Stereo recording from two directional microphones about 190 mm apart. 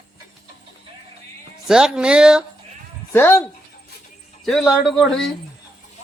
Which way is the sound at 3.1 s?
10° left (ahead or behind).